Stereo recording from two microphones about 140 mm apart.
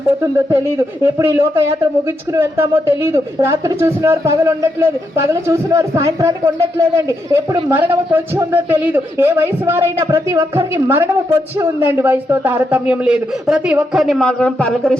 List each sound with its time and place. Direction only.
0.2 s a man's voice: 20° right (ahead or behind); by 14.9 s 5° left (ahead or behind)